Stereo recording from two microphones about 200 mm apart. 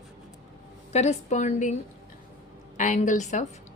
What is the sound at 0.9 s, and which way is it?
Speech, 35° left (ahead or behind).